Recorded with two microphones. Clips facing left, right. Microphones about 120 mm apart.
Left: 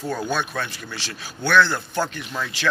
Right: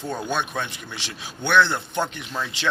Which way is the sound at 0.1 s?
20° right (ahead or behind).